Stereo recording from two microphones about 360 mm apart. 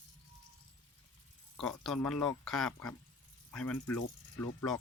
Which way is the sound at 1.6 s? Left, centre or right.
Centre.